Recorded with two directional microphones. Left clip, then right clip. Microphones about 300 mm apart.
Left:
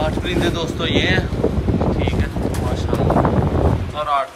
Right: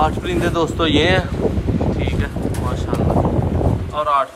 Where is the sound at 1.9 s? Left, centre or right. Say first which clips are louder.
Left 1 dB; centre.